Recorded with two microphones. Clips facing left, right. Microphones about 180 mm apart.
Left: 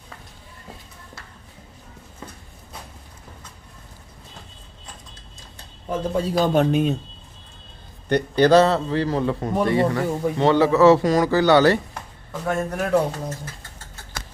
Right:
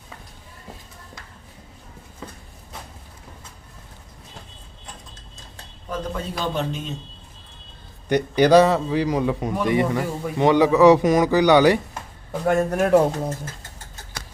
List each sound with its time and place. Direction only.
5.9 s a man's voice: 35° left (ahead or behind); by 6.9 s 60° left (ahead or behind)
8.1 s a man's voice: 15° right (ahead or behind)
12.5 s speech: 45° right (ahead or behind)